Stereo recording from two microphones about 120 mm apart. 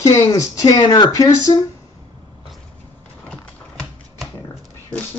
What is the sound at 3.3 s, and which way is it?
Typewriter, 5° left (ahead or behind).